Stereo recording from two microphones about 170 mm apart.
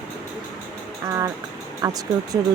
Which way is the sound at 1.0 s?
20° right (ahead or behind).